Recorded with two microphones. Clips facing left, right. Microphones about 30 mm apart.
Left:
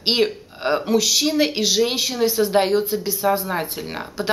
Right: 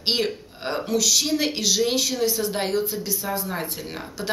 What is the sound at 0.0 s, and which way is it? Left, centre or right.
Speech, left.